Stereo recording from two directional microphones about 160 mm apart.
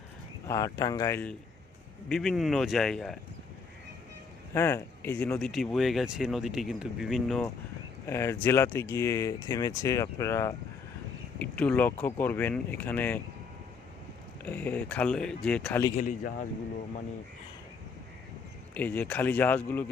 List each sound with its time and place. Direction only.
0.4 s speech: 20° left (ahead or behind)
2.0 s speech: centre (ahead or behind)
4.5 s speech: 15° left (ahead or behind)
5.4 s speech: centre (ahead or behind)
8.0 s speech: 15° left (ahead or behind)
14.4 s speech: 10° left (ahead or behind)
16.0 s a man's voice: 55° left (ahead or behind)
18.7 s speech: 10° left (ahead or behind)